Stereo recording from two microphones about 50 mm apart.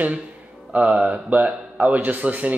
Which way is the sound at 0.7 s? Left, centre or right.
Right.